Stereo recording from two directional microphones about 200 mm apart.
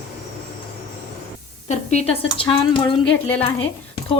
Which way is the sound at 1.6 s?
35° left (ahead or behind).